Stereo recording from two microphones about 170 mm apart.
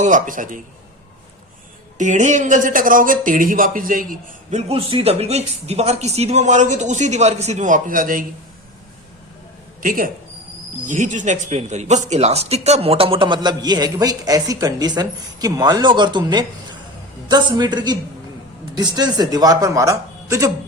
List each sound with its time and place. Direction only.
0.0 s a man's voice: 50° right (ahead or behind)
2.0 s a man's voice: 45° right (ahead or behind)
4.7 s speech: 35° right (ahead or behind); by 8.2 s 55° right (ahead or behind)
9.8 s speech: 55° right (ahead or behind); by 20.5 s 20° right (ahead or behind)